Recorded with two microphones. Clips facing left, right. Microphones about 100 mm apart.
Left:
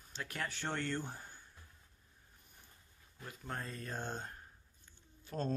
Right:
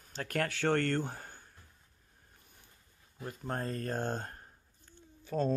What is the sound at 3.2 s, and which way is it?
Speech, 45° right (ahead or behind).